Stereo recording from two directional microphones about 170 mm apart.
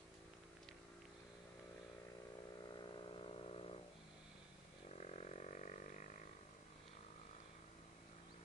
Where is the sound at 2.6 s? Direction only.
25° left (ahead or behind).